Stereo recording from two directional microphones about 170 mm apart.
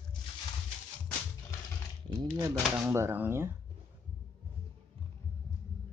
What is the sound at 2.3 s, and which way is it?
Speech, 15° right (ahead or behind).